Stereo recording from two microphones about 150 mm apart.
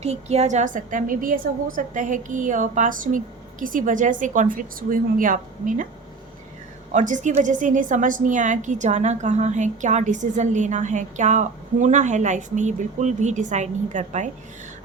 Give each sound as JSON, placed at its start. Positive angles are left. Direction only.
{"t": 0.0, "sound": "a woman's voice", "side_deg": -45}
{"t": 6.9, "sound": "a woman's voice", "side_deg": -55}